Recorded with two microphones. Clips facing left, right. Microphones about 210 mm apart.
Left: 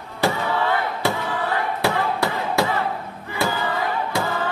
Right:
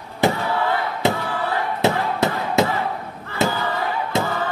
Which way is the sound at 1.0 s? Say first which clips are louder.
Right 4 dB; 20° right (ahead or behind).